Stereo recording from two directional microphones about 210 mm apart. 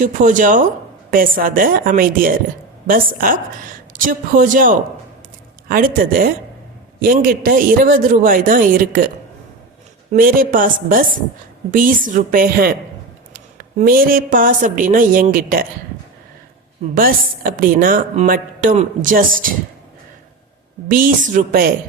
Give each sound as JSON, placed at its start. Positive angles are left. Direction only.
{"t": 0.0, "sound": "a woman's voice", "side_deg": -40}
{"t": 10.1, "sound": "a woman's voice", "side_deg": -40}
{"t": 16.9, "sound": "a woman's voice", "side_deg": -45}
{"t": 20.8, "sound": "a woman's voice", "side_deg": -40}